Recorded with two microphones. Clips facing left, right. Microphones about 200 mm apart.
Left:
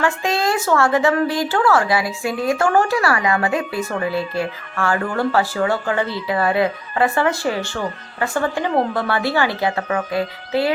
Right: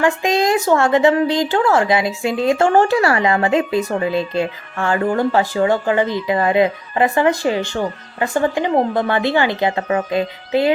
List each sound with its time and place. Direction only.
0.0 s a woman's voice: 15° right (ahead or behind)